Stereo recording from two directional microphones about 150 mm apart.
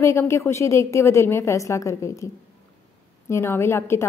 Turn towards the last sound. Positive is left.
turn(degrees=15)  # may be behind; listen again after turning